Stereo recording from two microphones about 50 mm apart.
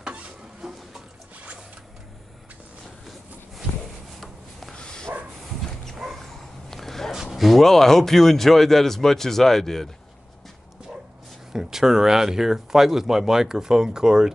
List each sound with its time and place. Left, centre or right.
0.0 s a sound: right
0.6 s water: centre
4.2 s rub: centre
4.7 s bow-wow: centre
6.0 s dog: centre
6.7 s a sound: centre
7.2 s speech: centre
11.5 s speech: centre